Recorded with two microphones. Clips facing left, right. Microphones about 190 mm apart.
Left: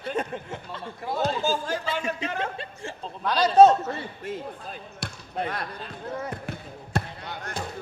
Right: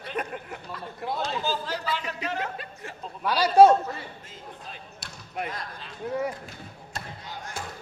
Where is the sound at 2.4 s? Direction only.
30° left (ahead or behind).